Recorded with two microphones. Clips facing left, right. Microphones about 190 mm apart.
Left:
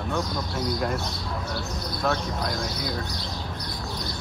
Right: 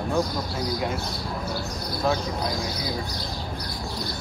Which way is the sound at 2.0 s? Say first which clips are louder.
Right 2 dB; centre (ahead or behind).